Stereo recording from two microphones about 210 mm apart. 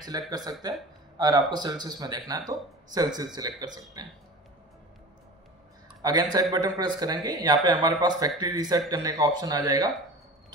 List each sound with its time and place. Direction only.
0.3 s a man's voice: 20° right (ahead or behind)
6.0 s a man's voice: 20° right (ahead or behind)